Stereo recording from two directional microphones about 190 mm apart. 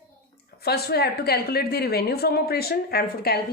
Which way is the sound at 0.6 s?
55° left (ahead or behind).